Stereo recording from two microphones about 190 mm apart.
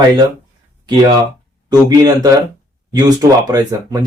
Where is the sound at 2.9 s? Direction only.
20° right (ahead or behind).